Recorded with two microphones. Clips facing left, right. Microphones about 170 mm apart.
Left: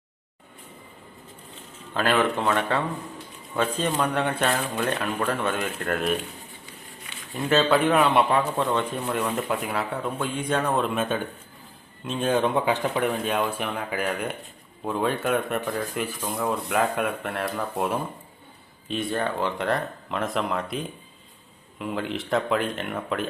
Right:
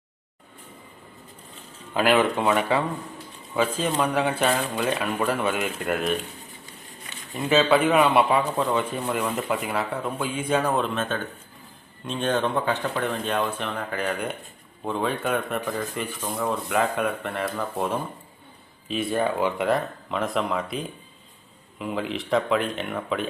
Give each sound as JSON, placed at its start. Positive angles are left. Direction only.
{"t": 1.9, "sound": "speech", "side_deg": -10}
{"t": 7.3, "sound": "speech", "side_deg": 0}